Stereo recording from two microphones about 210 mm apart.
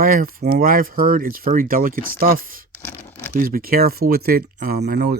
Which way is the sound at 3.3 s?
45° right (ahead or behind).